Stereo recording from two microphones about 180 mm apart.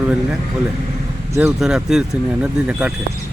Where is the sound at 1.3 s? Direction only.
15° right (ahead or behind).